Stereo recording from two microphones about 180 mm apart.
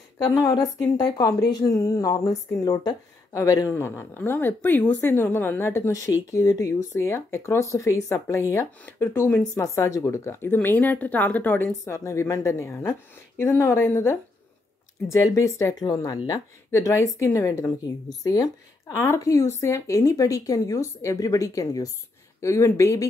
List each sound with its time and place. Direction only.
0.2 s speech: 20° left (ahead or behind)